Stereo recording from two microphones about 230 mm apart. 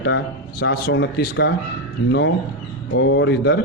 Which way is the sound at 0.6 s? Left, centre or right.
Left.